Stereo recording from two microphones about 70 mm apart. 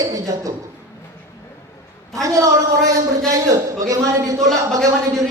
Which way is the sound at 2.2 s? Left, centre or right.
Right.